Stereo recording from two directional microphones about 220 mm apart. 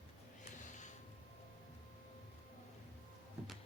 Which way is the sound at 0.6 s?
35° left (ahead or behind).